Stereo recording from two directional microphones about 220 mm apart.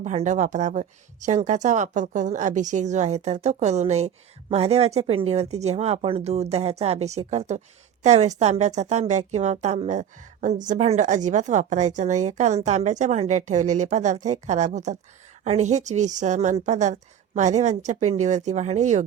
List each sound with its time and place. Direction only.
0.0 s a woman's voice: 30° right (ahead or behind)